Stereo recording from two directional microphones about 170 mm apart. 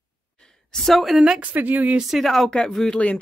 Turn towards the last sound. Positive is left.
turn(degrees=5)  # may be behind; listen again after turning